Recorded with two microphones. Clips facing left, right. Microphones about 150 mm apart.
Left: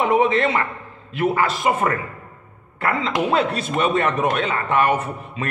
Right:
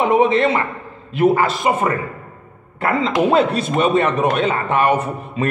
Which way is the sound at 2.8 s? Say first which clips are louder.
Right 4 dB; 40° right (ahead or behind).